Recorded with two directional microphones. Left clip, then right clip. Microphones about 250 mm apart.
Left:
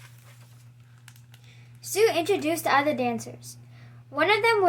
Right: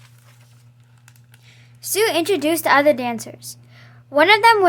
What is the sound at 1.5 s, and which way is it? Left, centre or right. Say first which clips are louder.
A woman's voice: right 6 dB; right.